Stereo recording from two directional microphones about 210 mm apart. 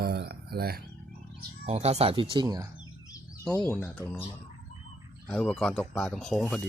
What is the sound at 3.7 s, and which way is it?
Speech, 10° left (ahead or behind).